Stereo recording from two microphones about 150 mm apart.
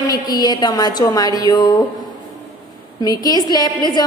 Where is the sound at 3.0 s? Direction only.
25° left (ahead or behind).